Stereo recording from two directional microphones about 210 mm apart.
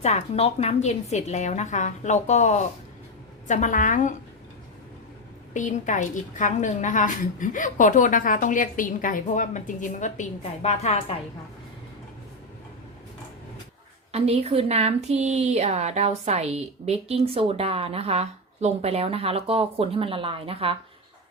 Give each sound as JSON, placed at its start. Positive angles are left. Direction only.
{"t": 0.0, "sound": "a woman's voice", "side_deg": 30}
{"t": 5.5, "sound": "a woman's voice", "side_deg": 35}
{"t": 14.1, "sound": "a woman's voice", "side_deg": -30}